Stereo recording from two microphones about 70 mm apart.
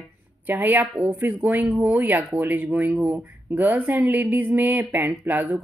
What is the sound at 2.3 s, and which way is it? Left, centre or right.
Speech, right.